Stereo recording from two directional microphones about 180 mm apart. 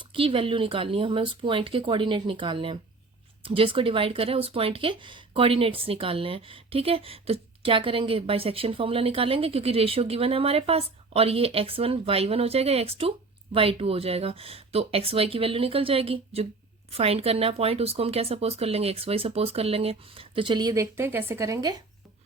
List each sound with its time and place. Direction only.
0.1 s speech: 30° right (ahead or behind)